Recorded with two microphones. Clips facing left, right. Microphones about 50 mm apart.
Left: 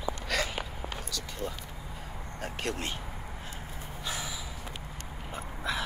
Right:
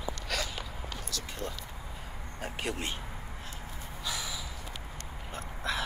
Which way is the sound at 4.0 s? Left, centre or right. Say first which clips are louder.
Even; left.